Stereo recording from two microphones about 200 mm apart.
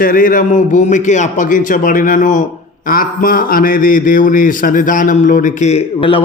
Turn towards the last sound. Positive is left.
turn(degrees=30)  # may be behind; listen again after turning